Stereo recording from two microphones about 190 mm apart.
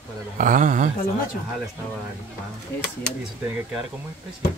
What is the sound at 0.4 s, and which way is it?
Speech, 45° right (ahead or behind).